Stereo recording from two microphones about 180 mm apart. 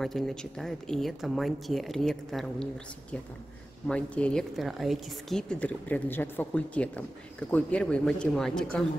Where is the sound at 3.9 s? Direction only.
5° left (ahead or behind).